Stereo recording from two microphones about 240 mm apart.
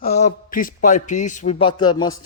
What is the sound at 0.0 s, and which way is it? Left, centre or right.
A man's voice, left.